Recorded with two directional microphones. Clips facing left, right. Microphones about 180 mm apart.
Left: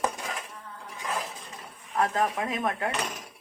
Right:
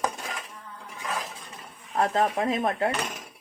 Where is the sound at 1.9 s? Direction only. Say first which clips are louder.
Right 2 dB; 30° right (ahead or behind).